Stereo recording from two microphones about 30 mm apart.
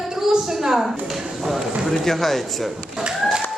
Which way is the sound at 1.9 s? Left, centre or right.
Centre.